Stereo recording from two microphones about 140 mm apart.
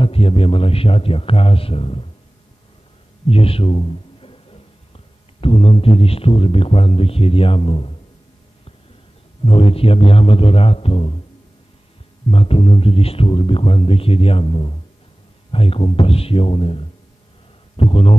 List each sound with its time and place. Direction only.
0.0 s speech: 40° left (ahead or behind)
3.3 s a man's voice: 45° left (ahead or behind)
9.4 s speech: 40° left (ahead or behind)
12.3 s speech: 45° left (ahead or behind)